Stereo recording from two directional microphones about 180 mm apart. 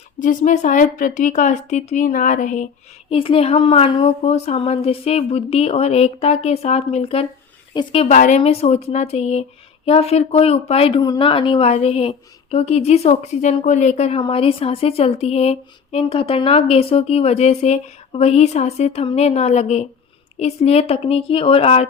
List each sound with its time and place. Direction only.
0.2 s a woman's voice: 45° left (ahead or behind)
3.1 s speech: 30° left (ahead or behind)
8.0 s speech: 40° left (ahead or behind)